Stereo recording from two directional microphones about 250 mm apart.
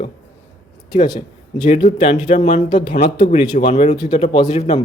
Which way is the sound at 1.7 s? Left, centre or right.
Left.